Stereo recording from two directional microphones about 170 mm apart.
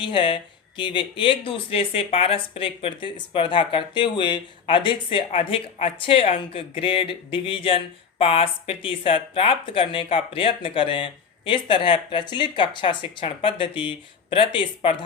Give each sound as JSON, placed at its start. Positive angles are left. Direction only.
{"t": 0.0, "sound": "speech", "side_deg": 30}